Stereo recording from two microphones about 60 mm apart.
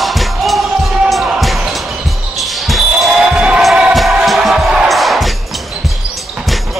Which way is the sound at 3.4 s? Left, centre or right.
Centre.